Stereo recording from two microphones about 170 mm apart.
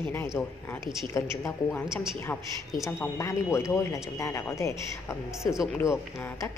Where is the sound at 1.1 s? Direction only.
15° left (ahead or behind).